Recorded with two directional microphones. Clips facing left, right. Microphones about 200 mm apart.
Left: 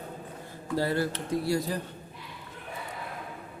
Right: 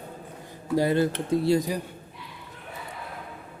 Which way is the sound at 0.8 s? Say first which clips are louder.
Right 5 dB; 20° right (ahead or behind).